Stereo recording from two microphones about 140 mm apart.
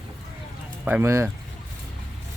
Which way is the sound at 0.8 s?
15° right (ahead or behind).